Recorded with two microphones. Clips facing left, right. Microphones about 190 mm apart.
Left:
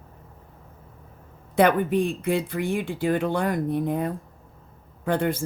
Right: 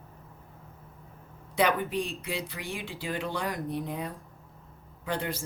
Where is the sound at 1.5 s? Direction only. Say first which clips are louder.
Left 7 dB; 50° left (ahead or behind).